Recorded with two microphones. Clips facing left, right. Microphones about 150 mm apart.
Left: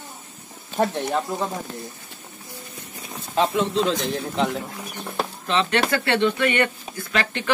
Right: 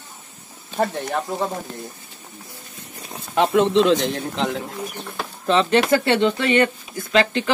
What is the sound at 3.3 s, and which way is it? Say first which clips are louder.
Speech: right 5 dB; 65° right (ahead or behind).